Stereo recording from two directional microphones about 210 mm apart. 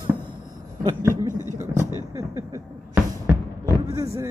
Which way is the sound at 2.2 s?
15° right (ahead or behind).